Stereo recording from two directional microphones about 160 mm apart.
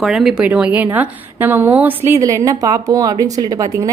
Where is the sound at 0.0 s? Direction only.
Centre (ahead or behind).